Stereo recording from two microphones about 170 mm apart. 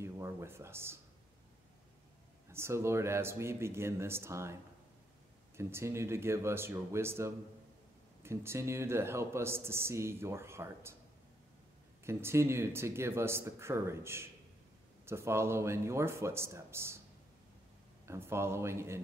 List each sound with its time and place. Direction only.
0.0 s speech: 15° right (ahead or behind)
2.5 s speech: 15° right (ahead or behind)
5.6 s speech: 15° right (ahead or behind)
12.0 s speech: 15° right (ahead or behind)
18.0 s speech: 15° right (ahead or behind)